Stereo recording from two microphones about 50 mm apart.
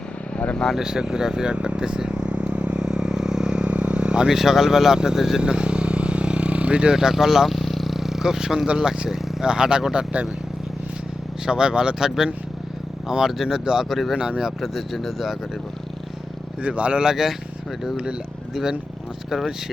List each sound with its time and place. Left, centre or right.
0.5 s speech: centre
0.8 s vehicle: centre
4.4 s speech: centre
11.4 s speech: centre
14.6 s speech: centre
16.6 s speech: right